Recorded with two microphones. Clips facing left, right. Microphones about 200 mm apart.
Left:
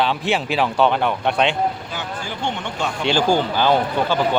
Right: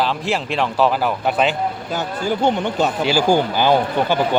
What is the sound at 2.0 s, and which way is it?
Speech, 40° right (ahead or behind).